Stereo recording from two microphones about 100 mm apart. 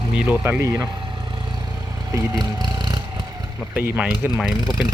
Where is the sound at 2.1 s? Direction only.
45° right (ahead or behind).